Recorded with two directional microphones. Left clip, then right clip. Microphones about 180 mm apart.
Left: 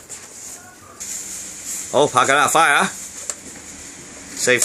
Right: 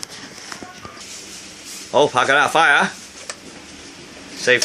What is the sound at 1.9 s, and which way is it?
Speech, 15° left (ahead or behind).